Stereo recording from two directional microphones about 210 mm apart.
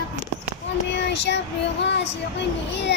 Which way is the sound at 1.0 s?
55° left (ahead or behind).